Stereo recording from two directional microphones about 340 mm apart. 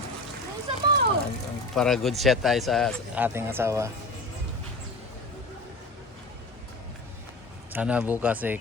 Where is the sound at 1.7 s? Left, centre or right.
Centre.